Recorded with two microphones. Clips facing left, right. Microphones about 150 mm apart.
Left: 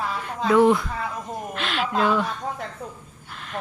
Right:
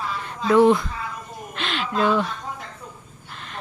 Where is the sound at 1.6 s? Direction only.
5° left (ahead or behind).